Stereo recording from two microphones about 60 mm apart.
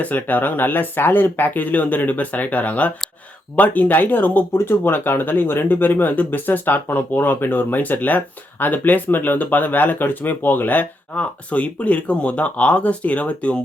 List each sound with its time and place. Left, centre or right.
0.0 s speech: left